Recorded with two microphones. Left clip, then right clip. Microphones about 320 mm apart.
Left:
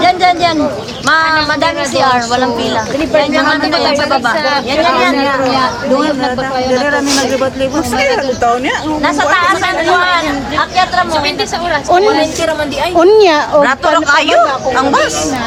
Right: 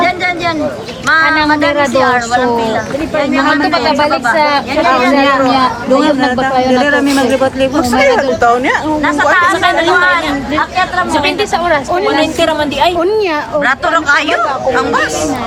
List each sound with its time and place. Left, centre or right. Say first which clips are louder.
0.0 s a sound: left 4 dB; centre
2.0 s a woman's voice: left 4 dB; centre
3.4 s speech: right 1 dB; right
8.1 s speech: right 2 dB; centre
9.0 s a woman's voice: even; centre
13.0 s a woman's voice: left 6 dB; left
13.6 s speech: left 2 dB; centre